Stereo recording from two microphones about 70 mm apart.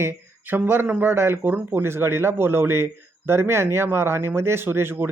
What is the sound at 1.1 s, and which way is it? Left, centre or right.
Speech, right.